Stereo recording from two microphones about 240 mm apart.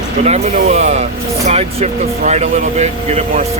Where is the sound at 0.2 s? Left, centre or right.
Right.